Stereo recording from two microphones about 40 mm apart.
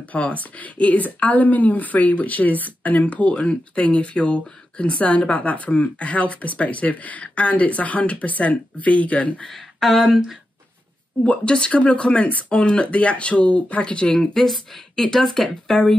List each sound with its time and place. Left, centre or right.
0.1 s a woman's voice: left
9.5 s speech: centre
11.4 s speech: left
14.1 s speech: centre